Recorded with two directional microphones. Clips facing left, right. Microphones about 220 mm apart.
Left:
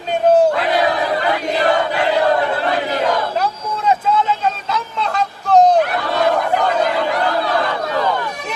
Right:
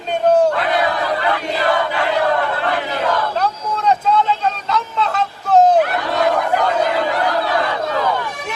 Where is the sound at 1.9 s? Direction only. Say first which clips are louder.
Left 2 dB; 20° left (ahead or behind).